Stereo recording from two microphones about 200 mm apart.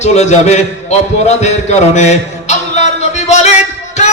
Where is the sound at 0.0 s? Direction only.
35° left (ahead or behind).